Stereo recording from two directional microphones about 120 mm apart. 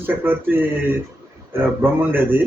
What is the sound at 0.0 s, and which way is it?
A man's voice, 15° right (ahead or behind).